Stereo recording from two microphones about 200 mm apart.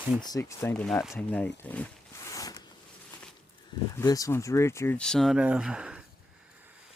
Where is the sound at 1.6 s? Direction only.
10° left (ahead or behind).